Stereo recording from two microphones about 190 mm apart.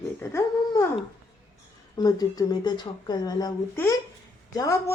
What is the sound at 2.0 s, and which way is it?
A woman's voice, 20° left (ahead or behind).